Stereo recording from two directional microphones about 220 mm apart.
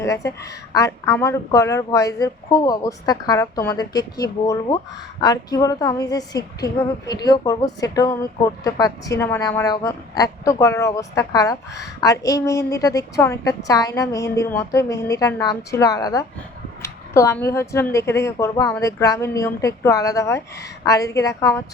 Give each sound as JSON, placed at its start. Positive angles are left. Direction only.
{"t": 0.0, "sound": "a woman's voice", "side_deg": 15}